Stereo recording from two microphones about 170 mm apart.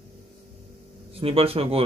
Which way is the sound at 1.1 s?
35° right (ahead or behind).